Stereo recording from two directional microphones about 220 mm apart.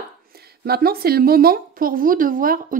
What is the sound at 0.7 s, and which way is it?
Speech, 45° right (ahead or behind).